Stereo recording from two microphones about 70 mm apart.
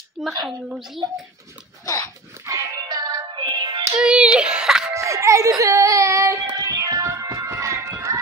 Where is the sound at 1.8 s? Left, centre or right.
Left.